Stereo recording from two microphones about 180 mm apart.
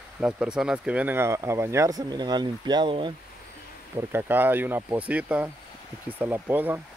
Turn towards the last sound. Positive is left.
turn(degrees=-10)  # may be behind; listen again after turning